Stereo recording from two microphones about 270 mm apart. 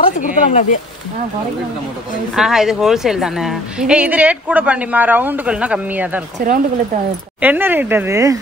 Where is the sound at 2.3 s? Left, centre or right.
Centre.